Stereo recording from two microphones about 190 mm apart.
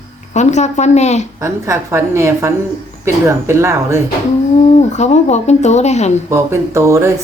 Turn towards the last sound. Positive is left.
turn(degrees=-15)  # may be behind; listen again after turning